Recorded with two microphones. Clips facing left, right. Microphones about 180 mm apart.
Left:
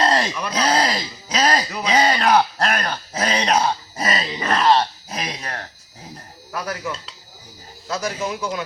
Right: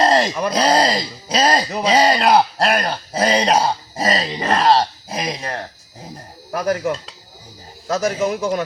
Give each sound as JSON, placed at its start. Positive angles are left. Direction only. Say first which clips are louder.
{"t": 0.0, "sound": "groan", "louder": "right 4 dB", "side_deg": -30}
{"t": 0.3, "sound": "speech", "louder": "right 4 dB", "side_deg": -35}
{"t": 5.3, "sound": "speech", "louder": "right 5 dB", "side_deg": -25}
{"t": 6.5, "sound": "a man's voice", "louder": "right 8 dB", "side_deg": -50}